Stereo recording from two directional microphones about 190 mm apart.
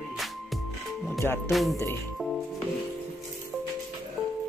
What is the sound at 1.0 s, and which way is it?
Music, 10° left (ahead or behind).